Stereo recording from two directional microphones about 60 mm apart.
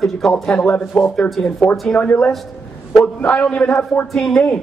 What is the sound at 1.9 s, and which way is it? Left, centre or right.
A man's voice, left.